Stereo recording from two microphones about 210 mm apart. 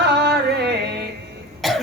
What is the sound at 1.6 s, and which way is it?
Cough, centre (ahead or behind).